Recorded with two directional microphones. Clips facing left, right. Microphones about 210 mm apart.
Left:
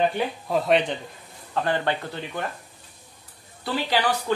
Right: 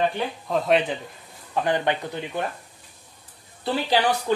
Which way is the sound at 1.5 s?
15° right (ahead or behind).